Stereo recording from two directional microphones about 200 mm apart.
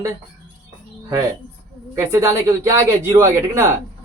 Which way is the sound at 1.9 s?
15° right (ahead or behind).